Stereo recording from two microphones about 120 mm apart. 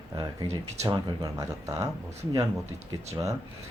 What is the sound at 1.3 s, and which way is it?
Speech, 30° right (ahead or behind).